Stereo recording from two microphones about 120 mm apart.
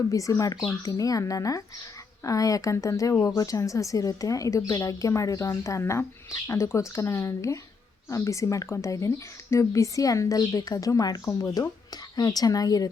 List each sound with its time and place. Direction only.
0.1 s speech: 25° left (ahead or behind)